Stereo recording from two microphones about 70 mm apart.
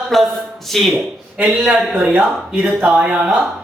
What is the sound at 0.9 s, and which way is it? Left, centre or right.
Speech, centre.